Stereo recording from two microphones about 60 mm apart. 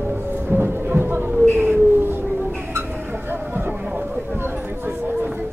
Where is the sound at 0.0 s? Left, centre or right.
Right.